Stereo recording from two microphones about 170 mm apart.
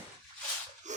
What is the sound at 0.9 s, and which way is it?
Dog, 45° right (ahead or behind).